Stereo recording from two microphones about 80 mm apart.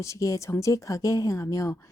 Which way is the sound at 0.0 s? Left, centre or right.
Left.